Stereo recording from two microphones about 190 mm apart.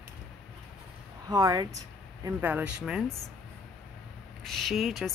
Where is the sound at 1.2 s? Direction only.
20° right (ahead or behind).